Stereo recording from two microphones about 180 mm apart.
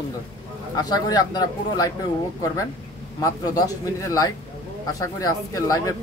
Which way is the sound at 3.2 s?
20° left (ahead or behind).